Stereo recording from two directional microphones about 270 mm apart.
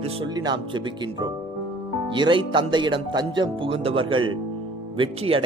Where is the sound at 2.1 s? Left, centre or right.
Centre.